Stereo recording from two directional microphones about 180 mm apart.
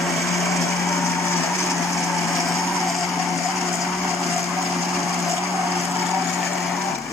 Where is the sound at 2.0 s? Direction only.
Centre (ahead or behind).